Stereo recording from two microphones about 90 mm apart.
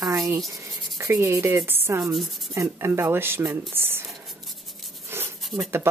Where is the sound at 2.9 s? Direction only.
25° right (ahead or behind).